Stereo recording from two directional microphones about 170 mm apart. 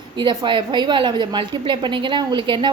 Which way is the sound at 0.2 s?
30° right (ahead or behind).